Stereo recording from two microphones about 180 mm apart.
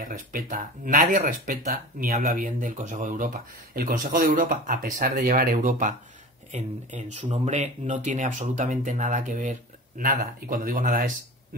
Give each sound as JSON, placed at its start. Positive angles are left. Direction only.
{"t": 0.0, "sound": "speech", "side_deg": -50}